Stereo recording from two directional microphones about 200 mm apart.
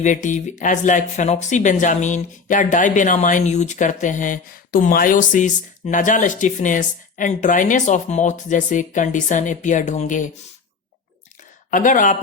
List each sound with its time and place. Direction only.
0.0 s speech: 40° left (ahead or behind)
11.7 s speech: 40° left (ahead or behind)